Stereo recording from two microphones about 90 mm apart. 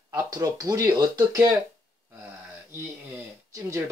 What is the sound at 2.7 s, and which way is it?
Speech, 30° right (ahead or behind).